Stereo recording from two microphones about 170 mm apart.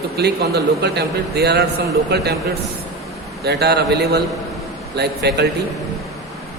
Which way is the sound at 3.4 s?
70° right (ahead or behind).